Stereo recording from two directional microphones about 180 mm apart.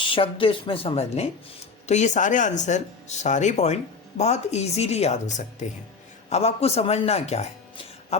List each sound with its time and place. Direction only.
0.0 s a woman's voice: 30° left (ahead or behind)